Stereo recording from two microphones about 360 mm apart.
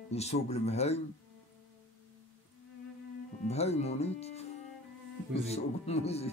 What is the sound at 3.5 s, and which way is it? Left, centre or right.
Music, centre.